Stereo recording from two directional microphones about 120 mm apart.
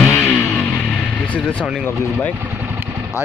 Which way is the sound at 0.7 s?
10° left (ahead or behind).